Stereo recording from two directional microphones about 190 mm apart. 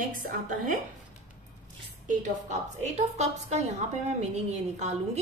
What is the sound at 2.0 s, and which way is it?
Speech, 40° right (ahead or behind).